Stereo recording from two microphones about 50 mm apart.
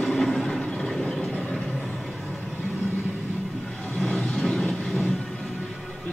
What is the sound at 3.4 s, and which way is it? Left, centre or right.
Vehicle, centre.